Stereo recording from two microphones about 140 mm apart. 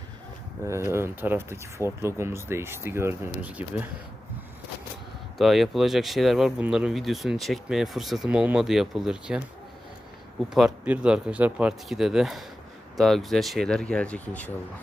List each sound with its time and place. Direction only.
0.6 s speech: 20° right (ahead or behind)
5.4 s speech: centre (ahead or behind)
10.5 s speech: 5° right (ahead or behind); by 14.5 s 10° left (ahead or behind)